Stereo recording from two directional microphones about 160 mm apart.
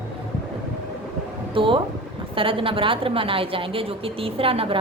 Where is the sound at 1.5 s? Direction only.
35° right (ahead or behind).